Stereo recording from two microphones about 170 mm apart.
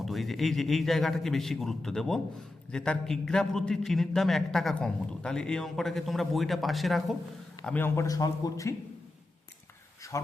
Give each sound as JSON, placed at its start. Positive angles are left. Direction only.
{"t": 0.0, "sound": "a man's voice", "side_deg": 0}